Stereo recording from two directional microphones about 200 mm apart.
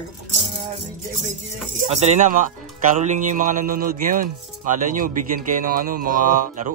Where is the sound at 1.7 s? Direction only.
35° right (ahead or behind).